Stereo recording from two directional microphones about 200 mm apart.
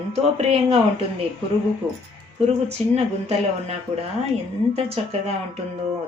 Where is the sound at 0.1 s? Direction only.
30° right (ahead or behind).